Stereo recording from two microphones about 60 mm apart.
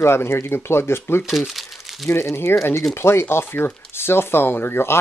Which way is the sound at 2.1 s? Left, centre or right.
Left.